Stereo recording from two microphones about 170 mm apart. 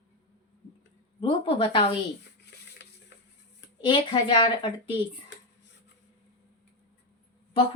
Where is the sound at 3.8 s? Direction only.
30° left (ahead or behind).